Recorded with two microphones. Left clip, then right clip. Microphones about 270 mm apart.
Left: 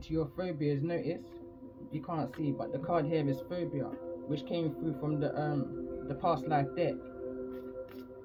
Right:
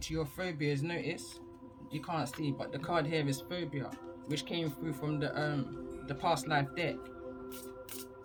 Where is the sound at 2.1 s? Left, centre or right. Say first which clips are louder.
Left 1 dB; right.